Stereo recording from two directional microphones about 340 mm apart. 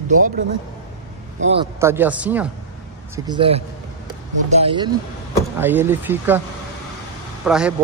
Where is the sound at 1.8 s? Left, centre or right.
Centre.